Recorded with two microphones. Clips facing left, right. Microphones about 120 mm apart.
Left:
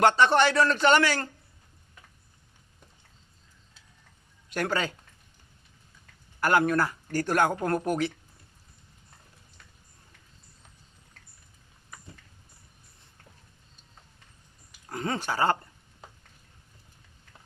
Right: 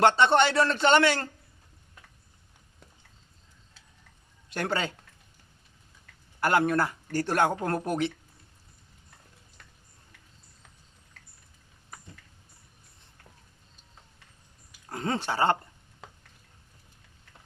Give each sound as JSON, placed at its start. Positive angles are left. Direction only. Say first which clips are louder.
{"t": 0.0, "sound": "speech", "louder": "even", "side_deg": -25}
{"t": 4.5, "sound": "speech", "louder": "left 1 dB", "side_deg": -25}
{"t": 6.4, "sound": "speech", "louder": "left 1 dB", "side_deg": -25}
{"t": 14.8, "sound": "speech", "louder": "right 1 dB", "side_deg": -25}